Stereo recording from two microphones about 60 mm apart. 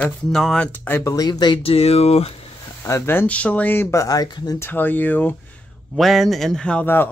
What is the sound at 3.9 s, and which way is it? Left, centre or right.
Speech, left.